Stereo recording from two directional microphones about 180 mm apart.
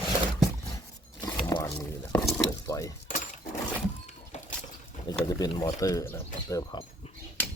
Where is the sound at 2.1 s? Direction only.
15° left (ahead or behind).